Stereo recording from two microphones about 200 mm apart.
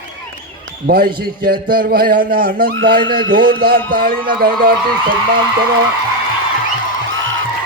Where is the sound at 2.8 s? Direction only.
70° right (ahead or behind).